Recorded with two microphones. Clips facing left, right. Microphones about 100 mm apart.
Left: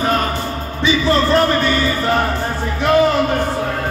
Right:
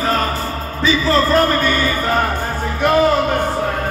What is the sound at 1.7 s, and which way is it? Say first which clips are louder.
Music: left 1 dB; 45° right (ahead or behind).